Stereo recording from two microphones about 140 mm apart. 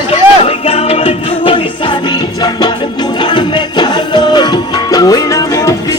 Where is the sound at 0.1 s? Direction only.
45° left (ahead or behind).